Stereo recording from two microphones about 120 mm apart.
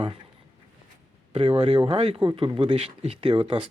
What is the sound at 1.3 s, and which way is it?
Speech, 60° right (ahead or behind).